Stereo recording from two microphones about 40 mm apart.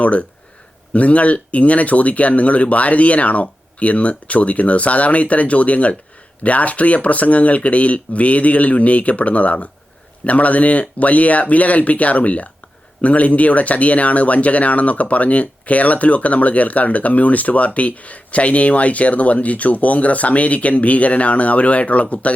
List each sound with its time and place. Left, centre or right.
0.0 s speech: left